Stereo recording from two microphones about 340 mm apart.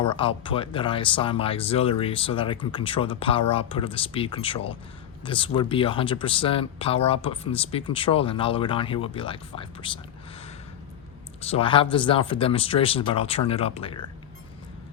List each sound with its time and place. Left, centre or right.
0.0 s speech: centre
11.3 s speech: centre